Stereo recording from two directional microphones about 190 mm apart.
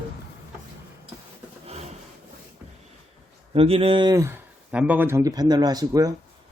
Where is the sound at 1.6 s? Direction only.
35° right (ahead or behind).